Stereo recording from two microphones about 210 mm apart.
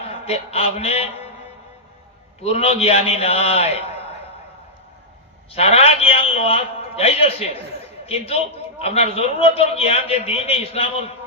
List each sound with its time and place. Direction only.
0.0 s a man's voice: 30° left (ahead or behind)
2.4 s a man's voice: 30° left (ahead or behind)
5.5 s a man's voice: 30° left (ahead or behind)